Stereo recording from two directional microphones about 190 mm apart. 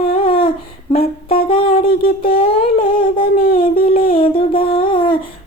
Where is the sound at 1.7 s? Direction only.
50° left (ahead or behind).